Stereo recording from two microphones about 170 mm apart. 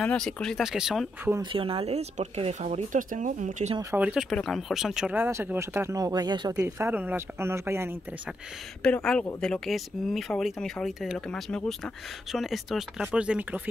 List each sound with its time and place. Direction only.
0.0 s speech: 5° left (ahead or behind)
1.3 s speech: 30° right (ahead or behind); by 3.7 s 50° right (ahead or behind)
3.9 s speech: 5° right (ahead or behind); by 6.5 s 25° right (ahead or behind)
6.5 s speech: 15° right (ahead or behind)
8.8 s speech: 5° left (ahead or behind)